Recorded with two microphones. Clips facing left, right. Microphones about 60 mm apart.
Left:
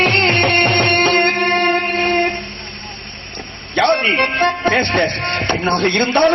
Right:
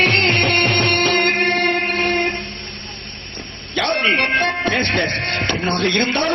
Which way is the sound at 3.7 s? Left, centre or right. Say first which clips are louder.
Left 3 dB; left.